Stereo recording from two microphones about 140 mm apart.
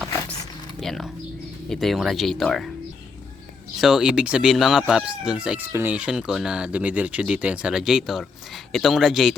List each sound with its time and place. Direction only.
0.8 s a sound: centre (ahead or behind)
1.7 s speech: centre (ahead or behind)
3.8 s speech: 5° right (ahead or behind)